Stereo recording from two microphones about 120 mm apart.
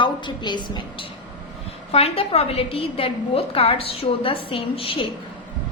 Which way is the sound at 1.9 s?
55° left (ahead or behind).